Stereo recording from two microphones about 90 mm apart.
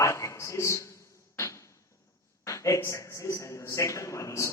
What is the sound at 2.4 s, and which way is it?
Speech, 35° left (ahead or behind).